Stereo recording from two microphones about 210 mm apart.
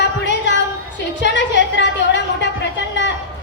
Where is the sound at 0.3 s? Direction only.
55° left (ahead or behind).